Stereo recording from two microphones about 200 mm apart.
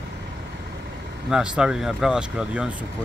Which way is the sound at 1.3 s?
5° right (ahead or behind).